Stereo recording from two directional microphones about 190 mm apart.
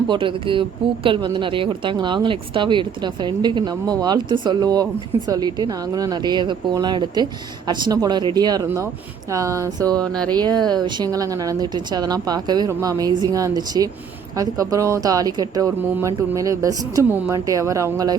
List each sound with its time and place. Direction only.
0.1 s speech: 25° right (ahead or behind)
10.0 s speech: 5° left (ahead or behind)
10.3 s speech: 20° right (ahead or behind)